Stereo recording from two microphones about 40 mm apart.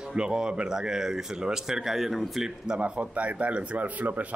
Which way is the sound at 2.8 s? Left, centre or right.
Right.